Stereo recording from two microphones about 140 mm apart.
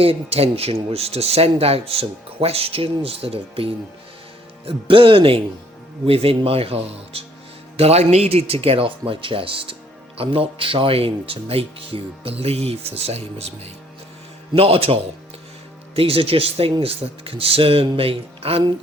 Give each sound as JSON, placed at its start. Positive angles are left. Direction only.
{"t": 0.0, "sound": "speech", "side_deg": -45}
{"t": 14.5, "sound": "speech", "side_deg": -45}
{"t": 16.0, "sound": "speech", "side_deg": -40}